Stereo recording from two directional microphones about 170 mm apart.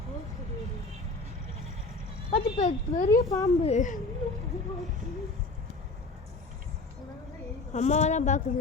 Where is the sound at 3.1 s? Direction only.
20° left (ahead or behind).